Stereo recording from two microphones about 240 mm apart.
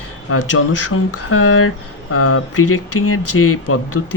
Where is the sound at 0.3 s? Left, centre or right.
Left.